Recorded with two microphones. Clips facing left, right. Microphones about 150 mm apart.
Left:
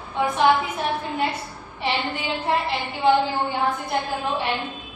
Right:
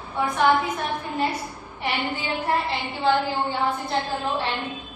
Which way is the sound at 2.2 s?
20° left (ahead or behind).